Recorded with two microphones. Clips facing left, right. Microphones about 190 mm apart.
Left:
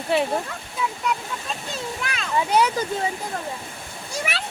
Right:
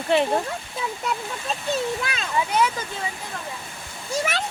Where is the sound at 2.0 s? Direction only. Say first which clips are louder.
Right 1 dB; 25° right (ahead or behind).